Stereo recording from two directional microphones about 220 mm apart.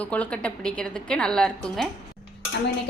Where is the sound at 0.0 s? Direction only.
5° left (ahead or behind).